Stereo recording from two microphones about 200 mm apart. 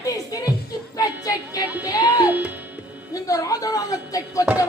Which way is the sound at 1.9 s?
20° left (ahead or behind).